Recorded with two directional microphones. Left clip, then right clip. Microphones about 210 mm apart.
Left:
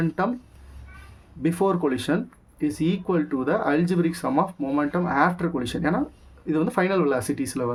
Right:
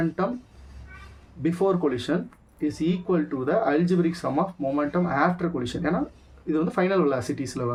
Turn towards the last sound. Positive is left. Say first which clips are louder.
# left 2 dB
turn(degrees=40)  # may be behind; listen again after turning